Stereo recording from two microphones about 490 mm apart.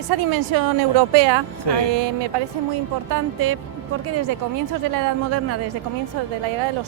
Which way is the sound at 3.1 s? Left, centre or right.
Right.